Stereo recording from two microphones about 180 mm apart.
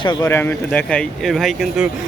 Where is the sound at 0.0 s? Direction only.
25° left (ahead or behind).